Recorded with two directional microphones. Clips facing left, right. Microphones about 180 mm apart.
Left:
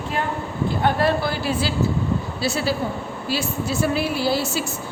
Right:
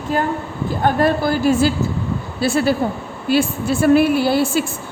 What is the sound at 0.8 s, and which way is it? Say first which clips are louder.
A woman's voice: right 4 dB; 45° right (ahead or behind).